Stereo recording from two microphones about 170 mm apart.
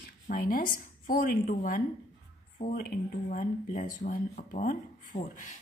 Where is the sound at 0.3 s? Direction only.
55° left (ahead or behind).